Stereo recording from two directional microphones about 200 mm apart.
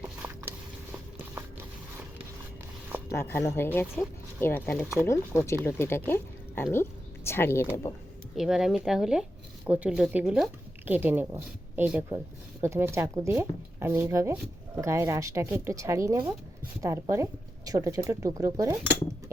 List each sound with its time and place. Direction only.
0.0 s a sound: 10° right (ahead or behind)
3.1 s speech: 15° left (ahead or behind)
8.4 s speech: centre (ahead or behind)